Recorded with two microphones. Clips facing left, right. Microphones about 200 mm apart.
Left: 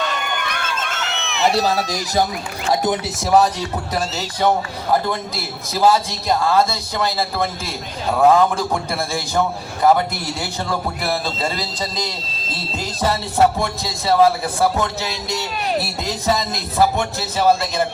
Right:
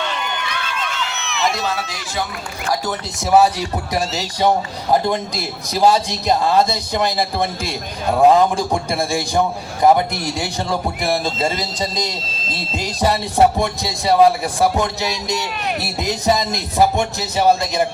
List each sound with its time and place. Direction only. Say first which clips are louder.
0.0 s crowd: left 1 dB; 50° left (ahead or behind)
1.4 s speech: left 4 dB; 35° left (ahead or behind)
2.6 s speech: left 4 dB; 20° left (ahead or behind)
3.2 s a man's voice: right 3 dB; 5° right (ahead or behind)